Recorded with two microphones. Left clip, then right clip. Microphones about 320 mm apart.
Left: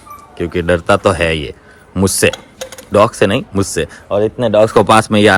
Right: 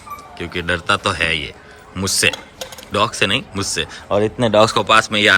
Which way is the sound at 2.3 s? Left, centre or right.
Left.